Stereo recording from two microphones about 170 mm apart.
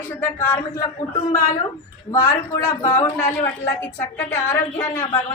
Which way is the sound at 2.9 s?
15° left (ahead or behind).